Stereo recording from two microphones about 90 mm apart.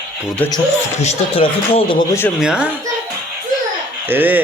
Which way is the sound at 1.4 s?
80° left.